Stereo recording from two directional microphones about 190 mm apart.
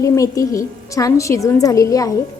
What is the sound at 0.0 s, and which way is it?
A woman's voice, 15° left (ahead or behind).